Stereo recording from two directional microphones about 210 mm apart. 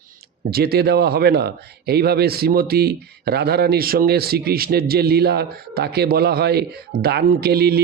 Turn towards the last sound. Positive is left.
turn(degrees=-50)  # may be behind; listen again after turning